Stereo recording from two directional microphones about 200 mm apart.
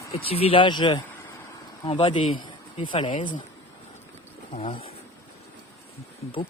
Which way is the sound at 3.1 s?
40° left (ahead or behind).